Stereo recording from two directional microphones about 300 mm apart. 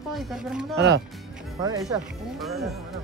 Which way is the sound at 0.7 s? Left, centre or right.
Right.